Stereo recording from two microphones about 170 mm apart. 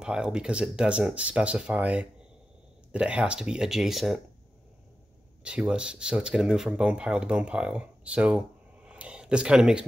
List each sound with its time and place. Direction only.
0.0 s speech: 5° right (ahead or behind)
5.4 s speech: 5° right (ahead or behind)